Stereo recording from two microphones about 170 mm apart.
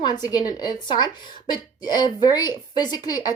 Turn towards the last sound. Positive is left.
turn(degrees=25)  # may be behind; listen again after turning